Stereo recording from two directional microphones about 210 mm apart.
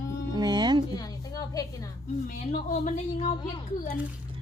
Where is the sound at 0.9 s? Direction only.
20° left (ahead or behind).